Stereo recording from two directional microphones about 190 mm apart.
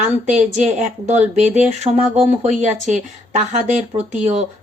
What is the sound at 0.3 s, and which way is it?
Speech, 40° right (ahead or behind).